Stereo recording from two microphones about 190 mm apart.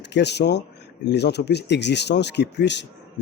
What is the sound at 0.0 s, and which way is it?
Speech, 65° left (ahead or behind).